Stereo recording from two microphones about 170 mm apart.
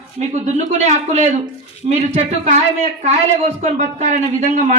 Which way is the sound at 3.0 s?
45° right (ahead or behind).